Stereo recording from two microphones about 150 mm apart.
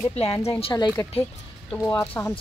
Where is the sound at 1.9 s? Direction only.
15° left (ahead or behind).